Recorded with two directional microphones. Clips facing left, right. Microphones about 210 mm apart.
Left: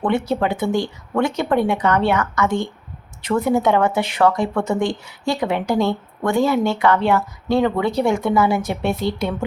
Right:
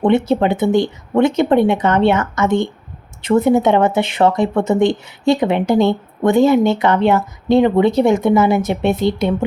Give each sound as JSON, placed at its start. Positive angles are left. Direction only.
{"t": 0.0, "sound": "speech", "side_deg": -25}